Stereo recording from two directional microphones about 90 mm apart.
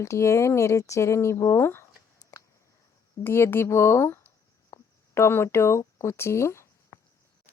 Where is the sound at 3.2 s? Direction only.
25° left (ahead or behind).